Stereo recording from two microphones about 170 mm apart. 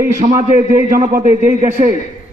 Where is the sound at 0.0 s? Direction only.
50° right (ahead or behind).